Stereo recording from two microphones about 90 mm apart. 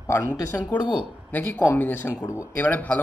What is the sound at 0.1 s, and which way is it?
Speech, 25° left (ahead or behind).